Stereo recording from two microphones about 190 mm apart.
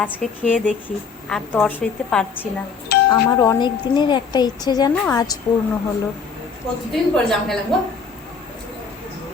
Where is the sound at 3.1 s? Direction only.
20° left (ahead or behind).